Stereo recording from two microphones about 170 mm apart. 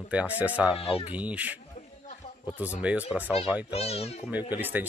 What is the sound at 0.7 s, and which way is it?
Speech, 35° left (ahead or behind).